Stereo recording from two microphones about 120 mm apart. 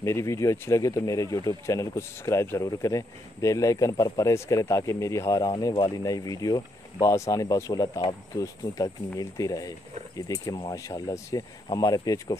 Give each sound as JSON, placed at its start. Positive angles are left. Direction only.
{"t": 0.0, "sound": "speech", "side_deg": 25}
{"t": 5.7, "sound": "speech", "side_deg": 40}
{"t": 6.0, "sound": "speech", "side_deg": 30}